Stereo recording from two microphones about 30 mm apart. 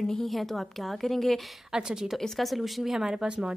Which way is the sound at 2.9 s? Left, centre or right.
Centre.